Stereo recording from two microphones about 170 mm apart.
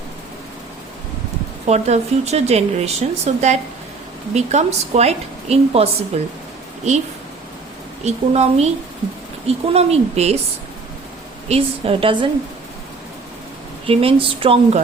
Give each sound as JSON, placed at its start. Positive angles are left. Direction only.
{"t": 1.6, "sound": "speech", "side_deg": -40}
{"t": 8.0, "sound": "speech", "side_deg": -40}
{"t": 11.4, "sound": "speech", "side_deg": -35}
{"t": 13.8, "sound": "speech", "side_deg": -35}